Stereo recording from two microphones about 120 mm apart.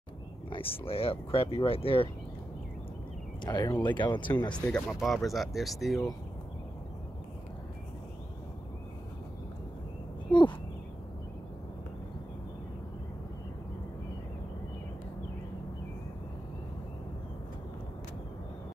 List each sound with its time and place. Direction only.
0.5 s speech: 50° left (ahead or behind)
3.4 s speech: 35° left (ahead or behind)
4.6 s speech: 10° left (ahead or behind)
10.3 s a sound: 40° left (ahead or behind)